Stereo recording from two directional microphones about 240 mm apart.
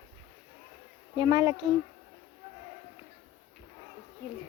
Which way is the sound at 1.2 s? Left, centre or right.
Centre.